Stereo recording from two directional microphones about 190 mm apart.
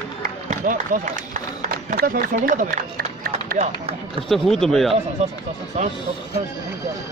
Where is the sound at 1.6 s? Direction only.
55° right (ahead or behind).